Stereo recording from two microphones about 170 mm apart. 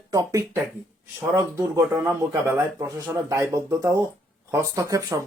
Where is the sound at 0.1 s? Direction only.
20° right (ahead or behind).